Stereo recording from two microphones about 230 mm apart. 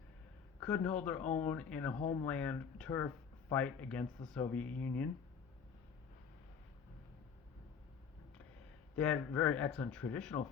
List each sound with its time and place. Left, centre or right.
0.6 s speech: centre
9.0 s speech: centre